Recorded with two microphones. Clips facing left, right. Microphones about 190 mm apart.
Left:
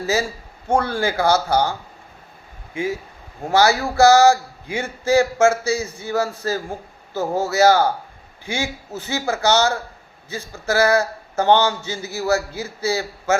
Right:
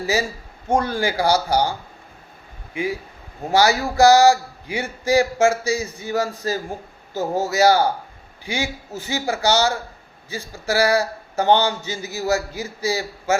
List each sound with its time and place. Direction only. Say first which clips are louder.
0.0 s a man's voice: left 1 dB; 15° right (ahead or behind)
2.7 s a man's voice: left 1 dB; 15° right (ahead or behind)